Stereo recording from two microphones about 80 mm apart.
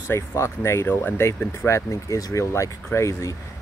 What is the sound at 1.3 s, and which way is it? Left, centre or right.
Speech, left.